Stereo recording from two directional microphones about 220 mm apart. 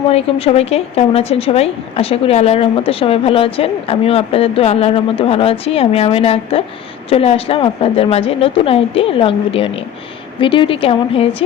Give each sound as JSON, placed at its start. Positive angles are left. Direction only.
{"t": 0.1, "sound": "speech", "side_deg": 25}